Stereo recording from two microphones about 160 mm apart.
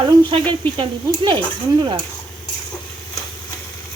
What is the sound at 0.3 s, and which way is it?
Speech, 35° right (ahead or behind).